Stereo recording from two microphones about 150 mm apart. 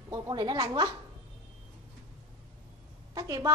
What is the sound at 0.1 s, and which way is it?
Speech, 30° right (ahead or behind).